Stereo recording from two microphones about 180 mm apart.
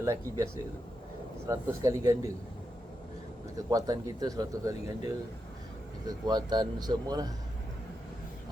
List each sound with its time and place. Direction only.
0.0 s speech: 15° right (ahead or behind)
1.5 s speech: 20° right (ahead or behind)
3.7 s speech: 20° right (ahead or behind)
6.1 s speech: 20° right (ahead or behind)